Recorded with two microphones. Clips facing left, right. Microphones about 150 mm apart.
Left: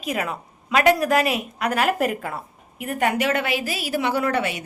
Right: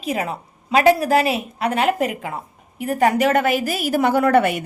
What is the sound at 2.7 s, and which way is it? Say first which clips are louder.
A woman's voice: right 5 dB; 35° right (ahead or behind).